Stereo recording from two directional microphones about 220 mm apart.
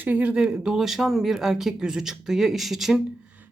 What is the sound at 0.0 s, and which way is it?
Speech, 5° right (ahead or behind).